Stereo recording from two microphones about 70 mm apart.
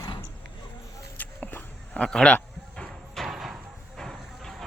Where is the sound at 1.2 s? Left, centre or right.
Left.